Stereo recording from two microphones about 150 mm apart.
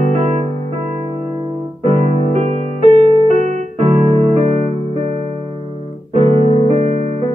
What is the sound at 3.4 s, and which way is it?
Keyboard, 45° right (ahead or behind).